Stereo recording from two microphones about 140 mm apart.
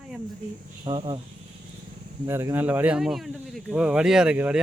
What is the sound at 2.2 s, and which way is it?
Speech, 15° right (ahead or behind).